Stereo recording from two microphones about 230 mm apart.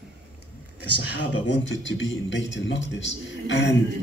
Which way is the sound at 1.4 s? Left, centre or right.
Left.